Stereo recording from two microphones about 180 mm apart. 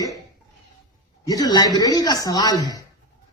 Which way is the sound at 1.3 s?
20° left (ahead or behind).